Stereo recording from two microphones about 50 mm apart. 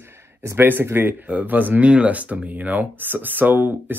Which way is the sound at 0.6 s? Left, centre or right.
Right.